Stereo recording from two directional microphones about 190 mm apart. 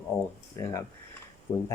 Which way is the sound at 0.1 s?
15° left (ahead or behind).